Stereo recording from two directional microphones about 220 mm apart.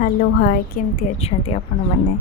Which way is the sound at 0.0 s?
40° left (ahead or behind).